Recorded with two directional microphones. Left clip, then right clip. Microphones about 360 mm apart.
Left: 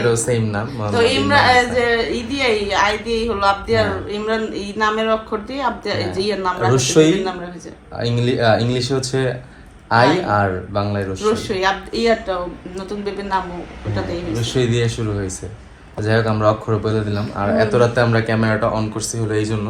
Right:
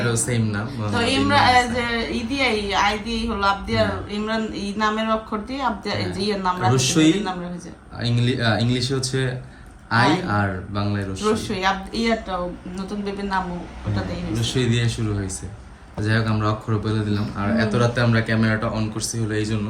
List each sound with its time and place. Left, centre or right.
0.1 s a man's voice: centre
0.9 s a woman's voice: centre
6.7 s a man's voice: centre
11.5 s a woman's voice: centre
14.3 s a man's voice: centre
16.0 s a man's voice: centre